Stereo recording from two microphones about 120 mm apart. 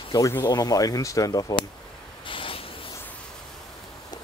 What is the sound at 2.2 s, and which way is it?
Spray, 45° left (ahead or behind).